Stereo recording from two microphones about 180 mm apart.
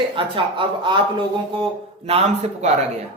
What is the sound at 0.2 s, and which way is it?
A woman's voice, 30° right (ahead or behind).